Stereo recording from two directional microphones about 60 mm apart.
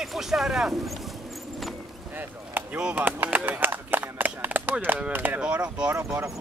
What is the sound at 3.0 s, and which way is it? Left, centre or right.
Speech, right.